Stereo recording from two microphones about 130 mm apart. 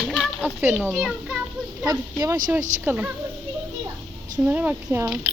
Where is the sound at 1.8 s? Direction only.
30° right (ahead or behind).